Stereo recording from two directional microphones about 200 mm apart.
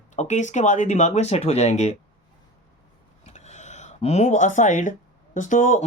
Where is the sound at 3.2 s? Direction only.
35° left (ahead or behind).